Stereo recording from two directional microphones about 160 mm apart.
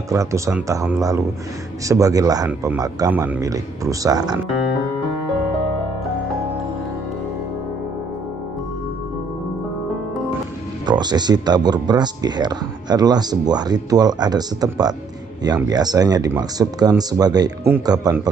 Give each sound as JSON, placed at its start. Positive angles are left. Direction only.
{"t": 0.1, "sound": "speech", "side_deg": -20}
{"t": 10.9, "sound": "speech", "side_deg": -25}